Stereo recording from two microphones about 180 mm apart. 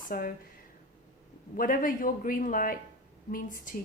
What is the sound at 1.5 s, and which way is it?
A woman's voice, 50° left (ahead or behind).